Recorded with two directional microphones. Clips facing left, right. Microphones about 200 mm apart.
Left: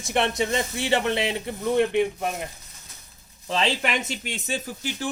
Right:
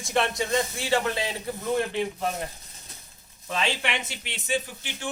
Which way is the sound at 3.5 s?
35° left (ahead or behind).